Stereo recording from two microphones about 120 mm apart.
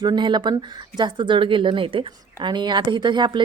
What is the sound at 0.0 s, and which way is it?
A woman's voice, 40° right (ahead or behind).